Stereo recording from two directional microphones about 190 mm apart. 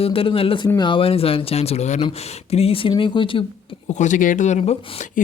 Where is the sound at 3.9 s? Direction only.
40° left (ahead or behind).